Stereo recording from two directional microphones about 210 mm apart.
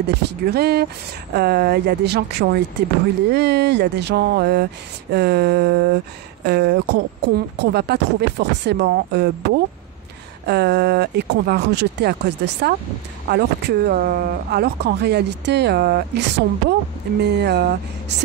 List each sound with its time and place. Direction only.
0.0 s speech: 50° right (ahead or behind)